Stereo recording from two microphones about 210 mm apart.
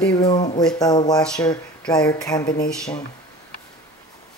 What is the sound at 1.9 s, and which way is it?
Speech, 15° left (ahead or behind).